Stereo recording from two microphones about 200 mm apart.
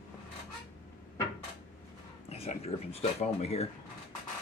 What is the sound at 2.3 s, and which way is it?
Speech, 30° left (ahead or behind).